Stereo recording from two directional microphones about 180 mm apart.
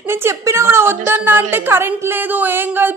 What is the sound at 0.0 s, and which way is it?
A woman's voice, 15° right (ahead or behind).